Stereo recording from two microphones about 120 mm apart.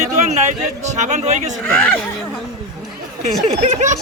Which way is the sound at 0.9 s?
85° right.